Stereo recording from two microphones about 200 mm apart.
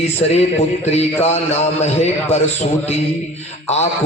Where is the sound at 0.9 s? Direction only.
30° left (ahead or behind).